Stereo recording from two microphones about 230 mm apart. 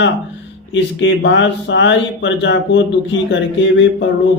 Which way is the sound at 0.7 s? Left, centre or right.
Left.